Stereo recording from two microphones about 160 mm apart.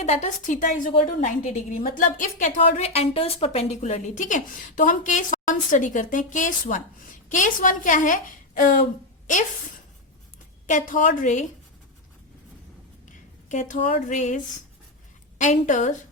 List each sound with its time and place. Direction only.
0.0 s a woman's voice: 45° left (ahead or behind)
10.7 s a woman's voice: 55° left (ahead or behind)
13.5 s a woman's voice: 50° left (ahead or behind)